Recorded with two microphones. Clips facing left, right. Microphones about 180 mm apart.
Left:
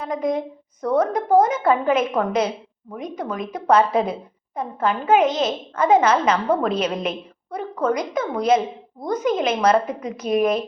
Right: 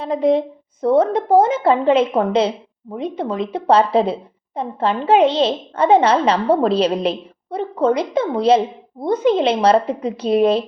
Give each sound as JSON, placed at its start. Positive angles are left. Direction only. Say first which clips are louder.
{"t": 0.0, "sound": "a woman's voice", "louder": "right 7 dB", "side_deg": -30}